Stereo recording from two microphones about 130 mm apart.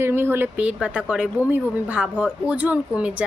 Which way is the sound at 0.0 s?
15° right (ahead or behind).